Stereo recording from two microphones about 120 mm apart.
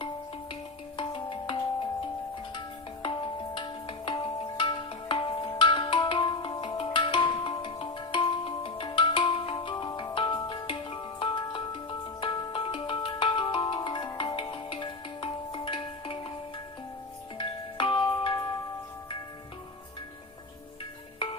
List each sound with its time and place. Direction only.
0.9 s music: 45° left (ahead or behind)
17.3 s music: 45° left (ahead or behind)